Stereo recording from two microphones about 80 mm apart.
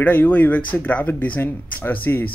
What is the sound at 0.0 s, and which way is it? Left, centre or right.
Speech, left.